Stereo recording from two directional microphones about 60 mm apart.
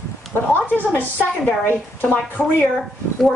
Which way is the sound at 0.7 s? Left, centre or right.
Left.